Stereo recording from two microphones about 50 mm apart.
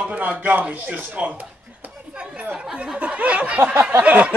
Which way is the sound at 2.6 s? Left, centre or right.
Centre.